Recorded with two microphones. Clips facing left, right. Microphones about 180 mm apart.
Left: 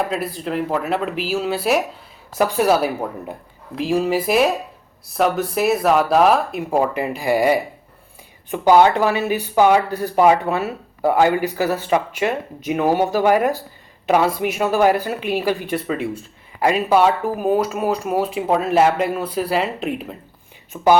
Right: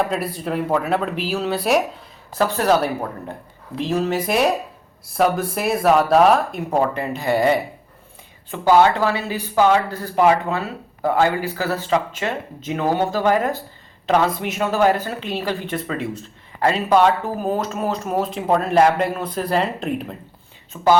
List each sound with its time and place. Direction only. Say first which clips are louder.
0.1 s speech: even; centre (ahead or behind)